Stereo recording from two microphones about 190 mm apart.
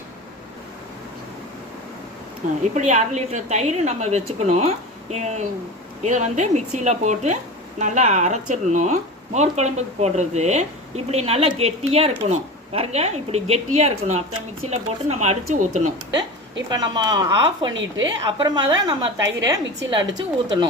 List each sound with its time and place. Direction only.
2.7 s speech: 40° right (ahead or behind)
16.6 s a woman's voice: 20° right (ahead or behind)